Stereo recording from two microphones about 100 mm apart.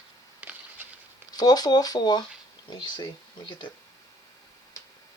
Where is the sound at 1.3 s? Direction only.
40° left (ahead or behind).